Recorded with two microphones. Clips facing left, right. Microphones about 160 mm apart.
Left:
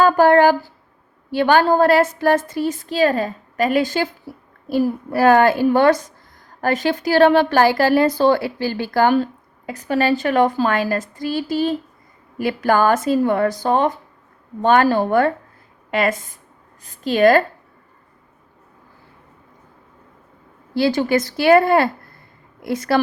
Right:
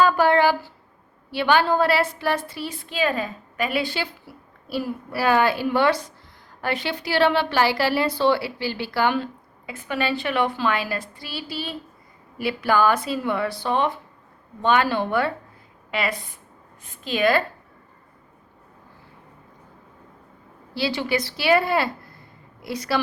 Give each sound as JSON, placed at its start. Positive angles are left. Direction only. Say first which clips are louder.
{"t": 0.0, "sound": "a sound", "louder": "left 5 dB", "side_deg": 45}
{"t": 1.3, "sound": "a woman's voice", "louder": "left 5 dB", "side_deg": 45}
{"t": 20.7, "sound": "a woman's voice", "louder": "left 7 dB", "side_deg": 50}